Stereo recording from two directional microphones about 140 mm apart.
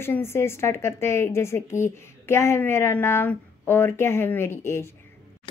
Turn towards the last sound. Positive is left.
turn(degrees=15)  # may be behind; listen again after turning